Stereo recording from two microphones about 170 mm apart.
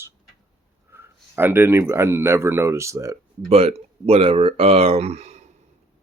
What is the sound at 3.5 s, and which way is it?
Speech, 35° right (ahead or behind).